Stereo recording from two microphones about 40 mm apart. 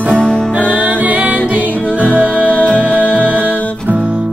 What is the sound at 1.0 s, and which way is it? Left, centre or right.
Music, right.